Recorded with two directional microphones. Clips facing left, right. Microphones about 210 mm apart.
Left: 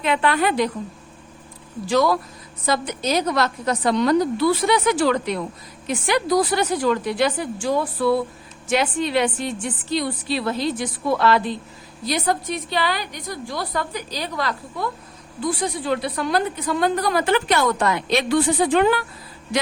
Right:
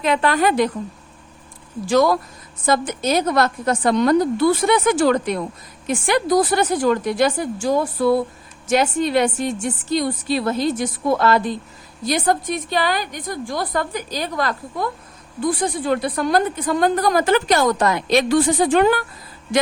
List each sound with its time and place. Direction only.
0.0 s a woman's voice: 40° right (ahead or behind)
1.9 s a woman's voice: 45° right (ahead or behind)